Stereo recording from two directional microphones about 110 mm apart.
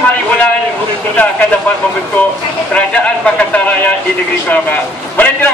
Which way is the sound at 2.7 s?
10° left (ahead or behind).